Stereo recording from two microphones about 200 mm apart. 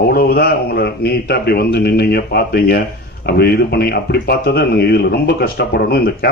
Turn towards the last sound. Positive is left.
turn(degrees=50)  # may be behind; listen again after turning